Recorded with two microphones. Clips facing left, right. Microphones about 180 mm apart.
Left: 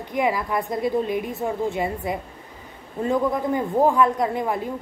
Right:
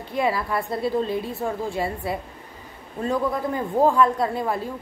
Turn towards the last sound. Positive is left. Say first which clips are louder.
# left 1 dB
turn(degrees=15)  # may be behind; listen again after turning